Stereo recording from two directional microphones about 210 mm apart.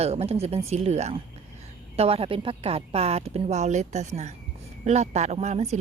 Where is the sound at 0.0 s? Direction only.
30° right (ahead or behind).